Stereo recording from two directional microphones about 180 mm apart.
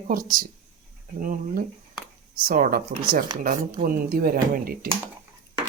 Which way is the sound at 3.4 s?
50° right (ahead or behind).